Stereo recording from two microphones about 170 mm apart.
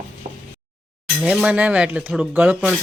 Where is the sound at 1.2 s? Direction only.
5° right (ahead or behind).